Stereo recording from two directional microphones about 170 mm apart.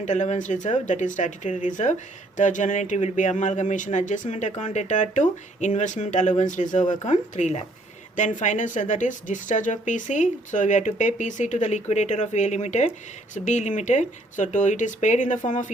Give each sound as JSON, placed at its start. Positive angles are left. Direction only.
{"t": 0.0, "sound": "speech", "side_deg": 45}